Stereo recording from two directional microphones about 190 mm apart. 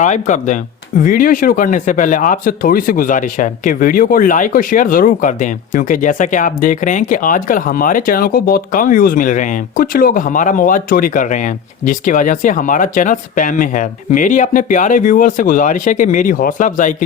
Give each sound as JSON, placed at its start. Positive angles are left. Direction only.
{"t": 0.0, "sound": "speech", "side_deg": 40}